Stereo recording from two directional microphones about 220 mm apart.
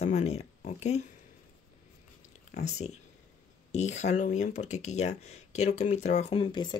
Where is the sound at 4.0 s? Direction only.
30° left (ahead or behind).